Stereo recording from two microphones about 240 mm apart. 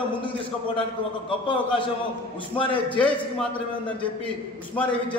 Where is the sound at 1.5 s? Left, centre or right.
Left.